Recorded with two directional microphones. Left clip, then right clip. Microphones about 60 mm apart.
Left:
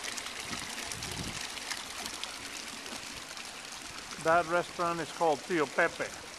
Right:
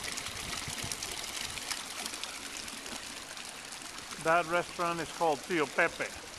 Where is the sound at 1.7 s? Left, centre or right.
Centre.